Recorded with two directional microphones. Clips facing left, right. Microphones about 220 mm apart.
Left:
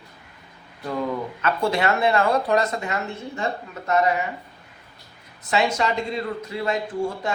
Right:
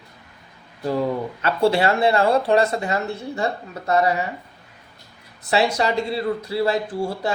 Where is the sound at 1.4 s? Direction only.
30° right (ahead or behind).